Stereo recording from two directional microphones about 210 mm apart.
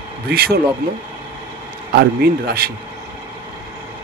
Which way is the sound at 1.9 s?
50° right (ahead or behind).